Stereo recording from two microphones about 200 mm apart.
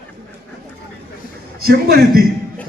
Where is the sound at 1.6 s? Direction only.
50° right (ahead or behind).